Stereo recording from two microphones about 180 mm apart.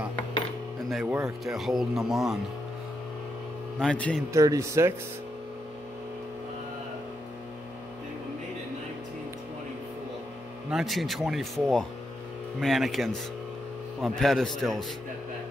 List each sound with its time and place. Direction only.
0.8 s speech: centre (ahead or behind)
3.8 s speech: 5° left (ahead or behind)
4.3 s speech: 15° right (ahead or behind)
10.7 s speech: centre (ahead or behind)